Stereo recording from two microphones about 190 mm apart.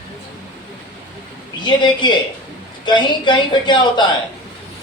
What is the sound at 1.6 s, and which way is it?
Speech, 25° left (ahead or behind).